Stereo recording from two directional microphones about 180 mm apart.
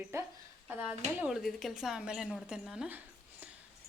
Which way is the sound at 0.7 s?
10° right (ahead or behind).